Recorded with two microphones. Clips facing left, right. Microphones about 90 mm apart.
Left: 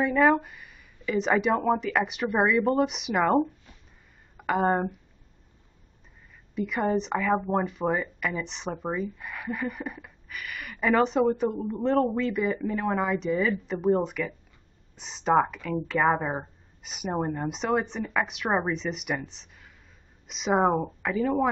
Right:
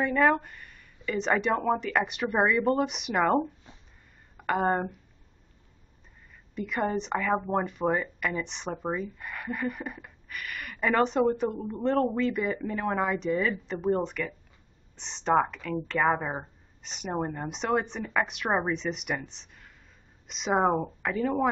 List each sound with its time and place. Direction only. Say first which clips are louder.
0.0 s speech: left 2 dB; 5° left (ahead or behind)
6.5 s speech: left 3 dB; centre (ahead or behind)